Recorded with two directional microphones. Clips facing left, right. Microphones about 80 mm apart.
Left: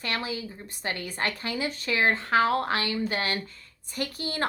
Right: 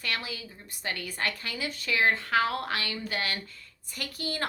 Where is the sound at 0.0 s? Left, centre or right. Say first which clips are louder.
Left 4 dB; left.